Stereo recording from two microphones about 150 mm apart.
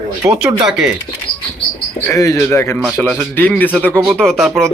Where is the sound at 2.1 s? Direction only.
20° left (ahead or behind).